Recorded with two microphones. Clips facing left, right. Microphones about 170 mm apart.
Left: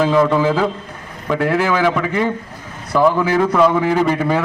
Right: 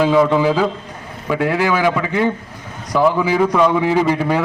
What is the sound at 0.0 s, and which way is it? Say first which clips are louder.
A man's voice: right 1 dB; 5° right (ahead or behind).